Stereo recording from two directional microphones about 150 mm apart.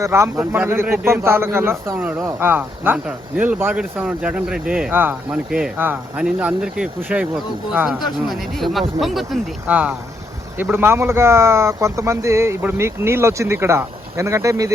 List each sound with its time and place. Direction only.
0.0 s a man's voice: 20° right (ahead or behind)